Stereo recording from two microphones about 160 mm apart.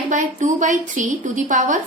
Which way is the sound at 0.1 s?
50° right (ahead or behind).